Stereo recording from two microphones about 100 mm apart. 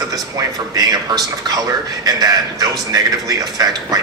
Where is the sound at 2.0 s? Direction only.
40° right (ahead or behind).